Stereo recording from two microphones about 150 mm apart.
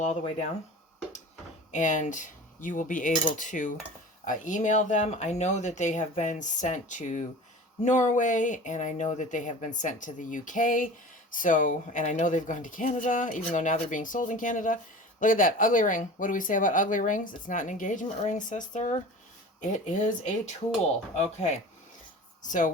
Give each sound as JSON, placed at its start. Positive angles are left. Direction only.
{"t": 0.0, "sound": "speech", "side_deg": 50}
{"t": 1.7, "sound": "speech", "side_deg": 55}